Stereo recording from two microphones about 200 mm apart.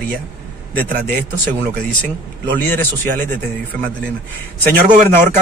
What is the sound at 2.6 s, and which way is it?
Speech, 10° left (ahead or behind).